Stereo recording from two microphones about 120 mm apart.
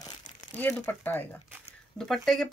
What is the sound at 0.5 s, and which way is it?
Speech, 15° left (ahead or behind).